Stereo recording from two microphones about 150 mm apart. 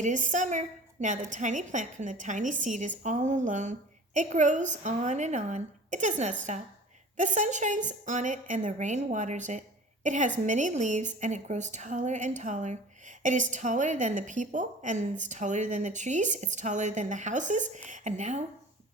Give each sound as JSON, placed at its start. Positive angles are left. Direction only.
{"t": 0.0, "sound": "a woman's voice", "side_deg": -55}